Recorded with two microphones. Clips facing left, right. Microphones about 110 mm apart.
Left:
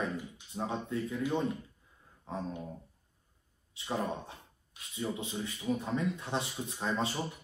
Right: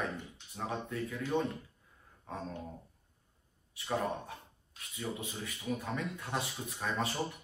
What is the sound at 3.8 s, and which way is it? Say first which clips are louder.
Speech: even; 25° left (ahead or behind).